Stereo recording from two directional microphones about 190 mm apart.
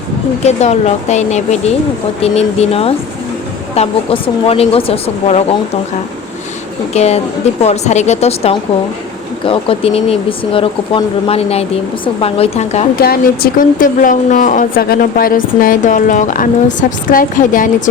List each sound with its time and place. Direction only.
0.4 s speech: 35° left (ahead or behind)
6.9 s speech: 35° left (ahead or behind)
13.0 s speech: 55° left (ahead or behind)